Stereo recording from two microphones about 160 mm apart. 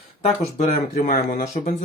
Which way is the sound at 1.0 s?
55° left (ahead or behind).